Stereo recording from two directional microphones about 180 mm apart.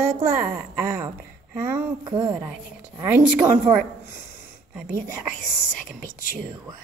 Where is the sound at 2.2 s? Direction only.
10° right (ahead or behind).